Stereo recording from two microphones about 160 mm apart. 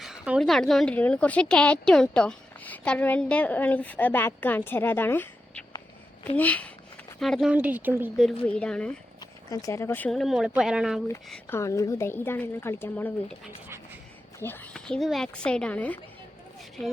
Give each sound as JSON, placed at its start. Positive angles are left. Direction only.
{"t": 0.0, "sound": "a woman's voice", "side_deg": 0}
{"t": 7.5, "sound": "speech", "side_deg": -10}
{"t": 8.2, "sound": "speech", "side_deg": 0}
{"t": 9.5, "sound": "a woman's voice", "side_deg": 20}
{"t": 10.1, "sound": "speech", "side_deg": 0}
{"t": 11.4, "sound": "a woman's voice", "side_deg": 15}
{"t": 14.3, "sound": "speech", "side_deg": 15}